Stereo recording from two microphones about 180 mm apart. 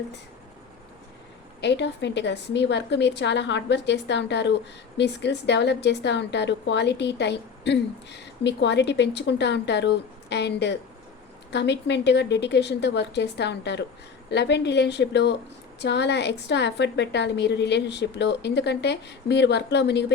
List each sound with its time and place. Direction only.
1.6 s a woman's voice: 75° left (ahead or behind)